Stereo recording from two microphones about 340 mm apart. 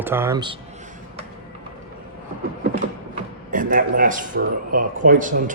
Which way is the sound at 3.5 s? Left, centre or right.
Right.